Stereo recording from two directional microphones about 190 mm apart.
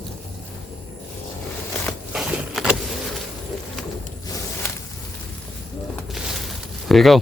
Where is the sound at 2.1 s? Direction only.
5° right (ahead or behind).